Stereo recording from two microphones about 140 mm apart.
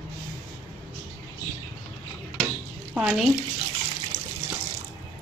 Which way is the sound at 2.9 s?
5° right (ahead or behind).